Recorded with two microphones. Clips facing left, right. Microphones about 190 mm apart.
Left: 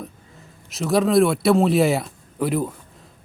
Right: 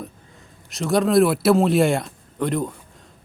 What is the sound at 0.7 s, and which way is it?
Speech, centre (ahead or behind).